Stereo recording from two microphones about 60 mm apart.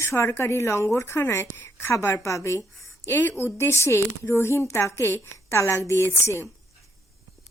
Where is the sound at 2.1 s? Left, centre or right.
Left.